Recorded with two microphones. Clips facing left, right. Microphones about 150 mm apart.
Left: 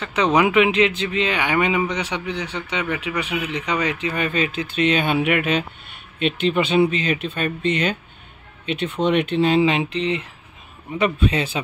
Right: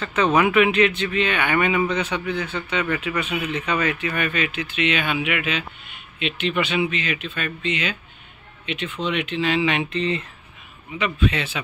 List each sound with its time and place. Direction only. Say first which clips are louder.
0.0 s speech: left 1 dB; 15° left (ahead or behind); by 6.6 s 45° left (ahead or behind)
6.6 s speech: left 6 dB; 35° left (ahead or behind); by 9.2 s 50° left (ahead or behind)
9.4 s speech: left 4 dB; 40° left (ahead or behind)
9.9 s speech: left 1 dB; 15° left (ahead or behind)
10.9 s speech: left 3 dB; 40° left (ahead or behind)